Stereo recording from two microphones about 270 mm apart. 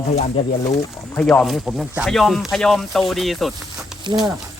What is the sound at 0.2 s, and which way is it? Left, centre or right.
Speech, left.